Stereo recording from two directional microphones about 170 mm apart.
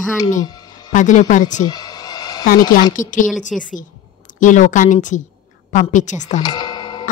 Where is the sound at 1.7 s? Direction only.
20° left (ahead or behind).